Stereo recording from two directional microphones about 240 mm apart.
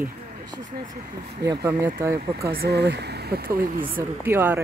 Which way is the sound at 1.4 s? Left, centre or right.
Centre.